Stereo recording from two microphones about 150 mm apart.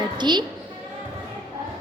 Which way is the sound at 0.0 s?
30° right (ahead or behind).